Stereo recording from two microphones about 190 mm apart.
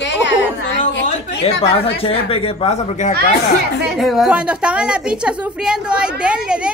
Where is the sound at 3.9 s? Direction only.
Centre (ahead or behind).